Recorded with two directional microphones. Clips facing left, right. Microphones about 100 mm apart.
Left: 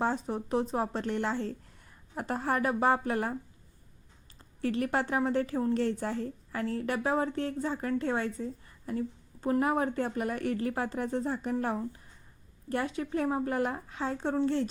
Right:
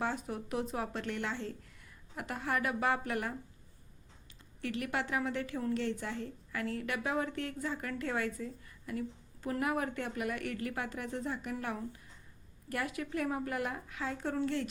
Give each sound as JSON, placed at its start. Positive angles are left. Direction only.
{"t": 0.0, "sound": "a woman's voice", "side_deg": 30}
{"t": 4.6, "sound": "a woman's voice", "side_deg": 35}